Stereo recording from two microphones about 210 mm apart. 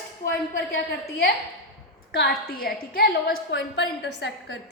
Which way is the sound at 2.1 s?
50° left (ahead or behind).